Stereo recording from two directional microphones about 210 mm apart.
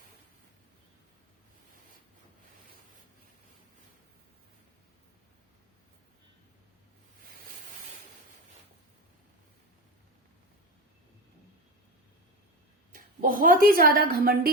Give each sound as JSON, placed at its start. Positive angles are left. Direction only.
{"t": 12.9, "sound": "a woman's voice", "side_deg": -40}